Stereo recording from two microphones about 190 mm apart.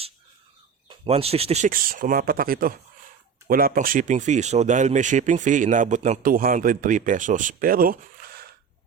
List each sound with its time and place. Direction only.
0.9 s speech: 30° right (ahead or behind)
1.7 s speech: 50° right (ahead or behind)